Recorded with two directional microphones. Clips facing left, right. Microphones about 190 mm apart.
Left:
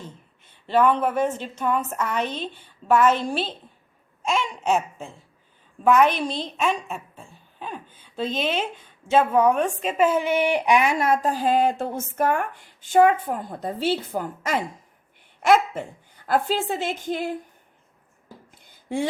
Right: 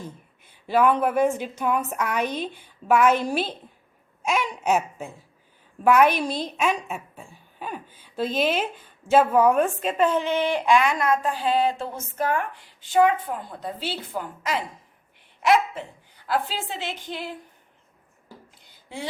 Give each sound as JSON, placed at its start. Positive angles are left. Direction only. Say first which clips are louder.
{"t": 0.0, "sound": "a woman's voice", "louder": "right 2 dB", "side_deg": -10}
{"t": 11.1, "sound": "a woman's voice", "louder": "left 2 dB", "side_deg": 40}
{"t": 18.6, "sound": "a sound", "louder": "left 10 dB", "side_deg": 50}